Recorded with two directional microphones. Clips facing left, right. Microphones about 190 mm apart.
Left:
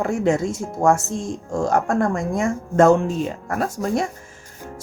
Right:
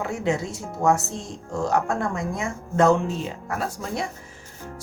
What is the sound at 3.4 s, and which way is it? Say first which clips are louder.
Speech: left 6 dB; 45° left (ahead or behind).